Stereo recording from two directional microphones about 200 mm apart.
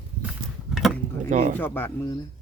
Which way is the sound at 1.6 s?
10° left (ahead or behind).